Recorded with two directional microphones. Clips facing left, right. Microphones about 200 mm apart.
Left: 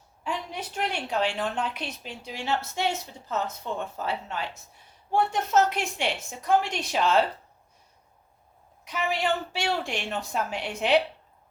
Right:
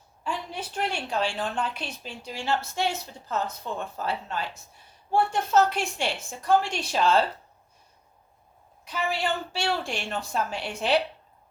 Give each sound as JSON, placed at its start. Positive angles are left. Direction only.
{"t": 0.9, "sound": "a woman's voice", "side_deg": 20}
{"t": 8.8, "sound": "a woman's voice", "side_deg": 15}